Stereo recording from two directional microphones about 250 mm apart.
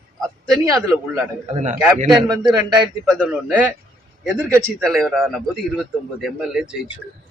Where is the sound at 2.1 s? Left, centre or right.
Centre.